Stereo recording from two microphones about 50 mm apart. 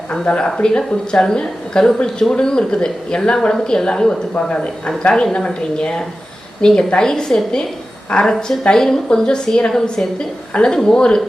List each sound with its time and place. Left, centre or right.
0.1 s a woman's voice: centre